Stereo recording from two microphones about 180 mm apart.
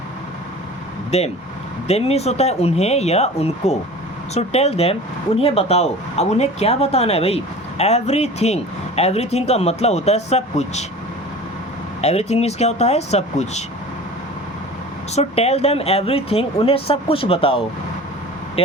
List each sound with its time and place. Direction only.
1.1 s speech: 40° left (ahead or behind)
12.0 s speech: 35° left (ahead or behind)
15.1 s speech: 35° left (ahead or behind)